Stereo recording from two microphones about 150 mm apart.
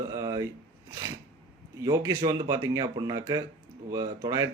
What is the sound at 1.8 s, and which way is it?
Speech, 20° right (ahead or behind).